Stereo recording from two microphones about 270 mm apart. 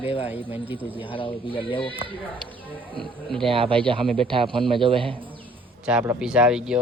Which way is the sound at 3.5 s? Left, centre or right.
Centre.